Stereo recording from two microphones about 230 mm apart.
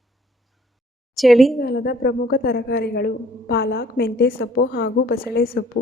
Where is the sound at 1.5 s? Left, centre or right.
Left.